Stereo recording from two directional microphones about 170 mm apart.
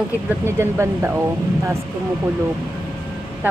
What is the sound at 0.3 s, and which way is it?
Speech, 15° right (ahead or behind).